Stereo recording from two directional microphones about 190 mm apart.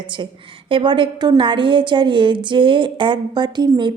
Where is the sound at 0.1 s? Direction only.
25° right (ahead or behind).